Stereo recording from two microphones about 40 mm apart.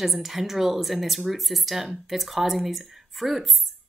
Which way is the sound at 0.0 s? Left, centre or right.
Centre.